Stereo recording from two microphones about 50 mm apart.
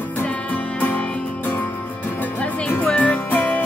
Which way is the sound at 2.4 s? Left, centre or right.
Left.